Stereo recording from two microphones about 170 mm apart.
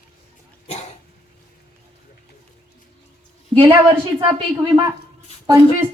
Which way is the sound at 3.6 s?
15° right (ahead or behind).